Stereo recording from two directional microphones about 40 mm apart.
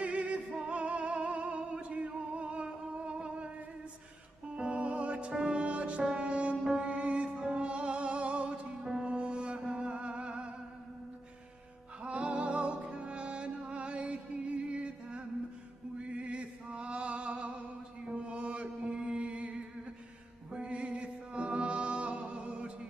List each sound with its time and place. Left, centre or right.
0.0 s music: right
5.7 s music: right
6.6 s music: centre
6.9 s music: right
12.0 s music: right
16.0 s chant: right
18.0 s mantra: right
20.5 s music: right